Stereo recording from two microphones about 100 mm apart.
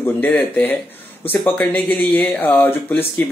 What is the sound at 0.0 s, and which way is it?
Speech, 15° left (ahead or behind).